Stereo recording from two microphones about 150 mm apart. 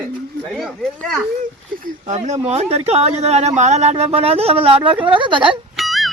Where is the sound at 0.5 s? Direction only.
Centre (ahead or behind).